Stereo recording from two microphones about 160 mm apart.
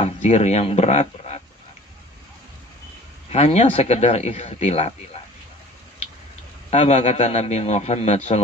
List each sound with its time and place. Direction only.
0.0 s speech: 45° left (ahead or behind)
3.3 s a man's voice: 40° left (ahead or behind)
6.7 s a man's voice: 40° left (ahead or behind)